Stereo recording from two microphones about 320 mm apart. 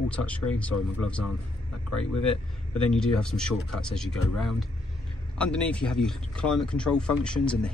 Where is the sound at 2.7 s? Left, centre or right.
Centre.